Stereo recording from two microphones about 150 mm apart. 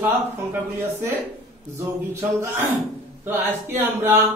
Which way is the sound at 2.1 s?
20° right (ahead or behind).